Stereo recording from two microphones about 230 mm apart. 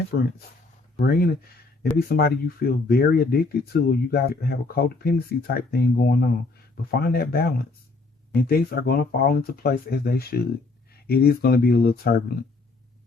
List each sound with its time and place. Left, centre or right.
0.1 s speech: left